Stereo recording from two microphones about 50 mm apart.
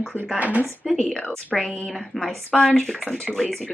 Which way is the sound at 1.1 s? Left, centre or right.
Left.